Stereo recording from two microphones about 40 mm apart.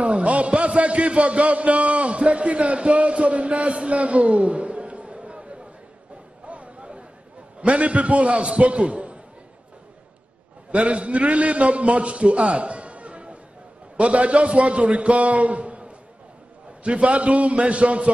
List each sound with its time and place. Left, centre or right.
0.0 s a man's voice: right
6.4 s a sound: right
7.6 s a man's voice: right
10.7 s a man's voice: right